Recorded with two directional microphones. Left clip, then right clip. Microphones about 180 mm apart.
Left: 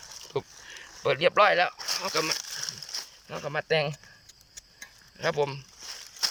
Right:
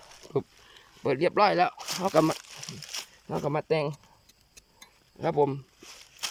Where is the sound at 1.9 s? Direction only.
35° right (ahead or behind).